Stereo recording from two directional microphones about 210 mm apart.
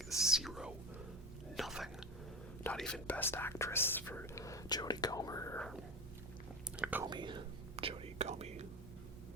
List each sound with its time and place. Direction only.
0.3 s speech: centre (ahead or behind)
1.5 s whispering: centre (ahead or behind)
2.6 s speech: 5° left (ahead or behind)
6.7 s whispering: 5° right (ahead or behind)
7.1 s whispering: 20° right (ahead or behind)